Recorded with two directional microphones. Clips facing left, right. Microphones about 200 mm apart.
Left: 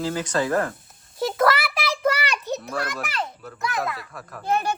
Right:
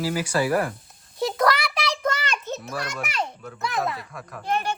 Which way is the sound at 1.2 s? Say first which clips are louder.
Left 1 dB; centre (ahead or behind).